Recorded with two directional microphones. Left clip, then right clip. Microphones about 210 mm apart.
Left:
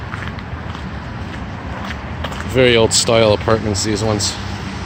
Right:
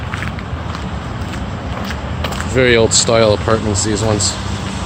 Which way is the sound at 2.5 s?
20° left (ahead or behind).